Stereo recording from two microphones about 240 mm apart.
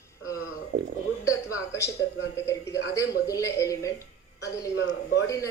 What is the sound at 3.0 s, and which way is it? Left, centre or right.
A man's voice, centre.